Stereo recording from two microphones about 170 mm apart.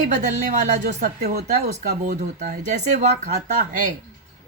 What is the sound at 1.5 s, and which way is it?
A woman's voice, 45° right (ahead or behind).